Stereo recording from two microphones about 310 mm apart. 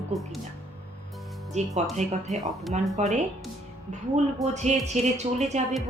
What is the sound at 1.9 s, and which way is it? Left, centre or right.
A woman's voice, right.